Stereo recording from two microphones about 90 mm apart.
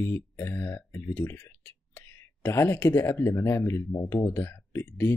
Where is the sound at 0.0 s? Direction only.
25° left (ahead or behind).